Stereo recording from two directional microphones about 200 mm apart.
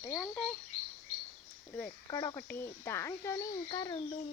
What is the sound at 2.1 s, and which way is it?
Speech, 20° left (ahead or behind).